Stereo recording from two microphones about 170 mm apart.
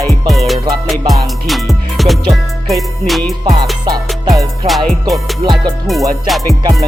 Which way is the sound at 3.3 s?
20° right (ahead or behind).